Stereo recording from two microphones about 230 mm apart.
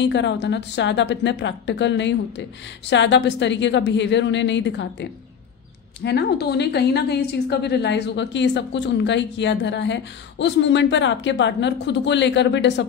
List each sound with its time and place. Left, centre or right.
0.0 s a woman's voice: left
6.0 s a woman's voice: left